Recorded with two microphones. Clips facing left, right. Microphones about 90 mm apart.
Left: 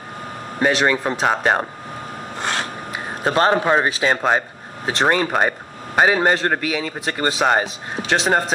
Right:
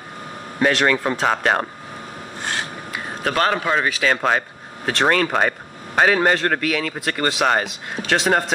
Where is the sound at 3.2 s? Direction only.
30° left (ahead or behind).